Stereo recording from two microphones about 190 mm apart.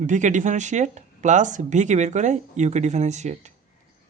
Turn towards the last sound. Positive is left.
turn(degrees=-35)  # may be behind; listen again after turning